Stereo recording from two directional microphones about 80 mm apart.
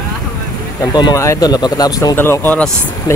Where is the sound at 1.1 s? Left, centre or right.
Left.